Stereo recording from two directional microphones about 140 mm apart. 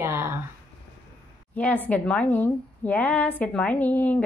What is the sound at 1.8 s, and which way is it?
A woman's voice, 10° left (ahead or behind).